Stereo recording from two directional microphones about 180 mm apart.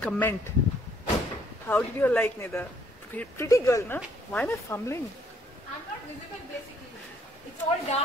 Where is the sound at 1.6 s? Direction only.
10° left (ahead or behind).